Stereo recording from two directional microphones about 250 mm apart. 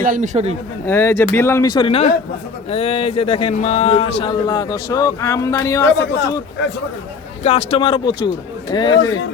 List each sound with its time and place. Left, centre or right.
0.0 s speech: right
0.9 s a man's voice: centre
6.0 s speech: left
7.4 s a man's voice: left